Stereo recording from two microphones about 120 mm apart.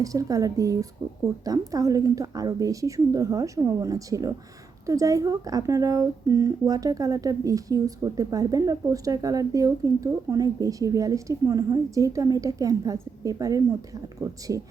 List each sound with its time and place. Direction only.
0.0 s speech: 30° right (ahead or behind)